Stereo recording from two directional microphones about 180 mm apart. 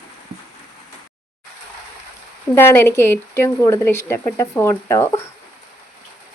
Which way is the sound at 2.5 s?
10° left (ahead or behind).